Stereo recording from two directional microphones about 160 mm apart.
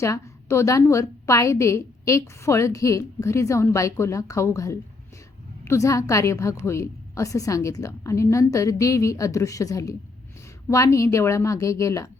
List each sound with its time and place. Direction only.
0.0 s a woman's voice: 20° left (ahead or behind)